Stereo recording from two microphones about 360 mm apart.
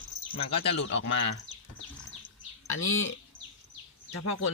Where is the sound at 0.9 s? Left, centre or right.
Left.